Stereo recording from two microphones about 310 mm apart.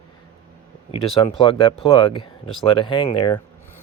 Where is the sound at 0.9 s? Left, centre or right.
Centre.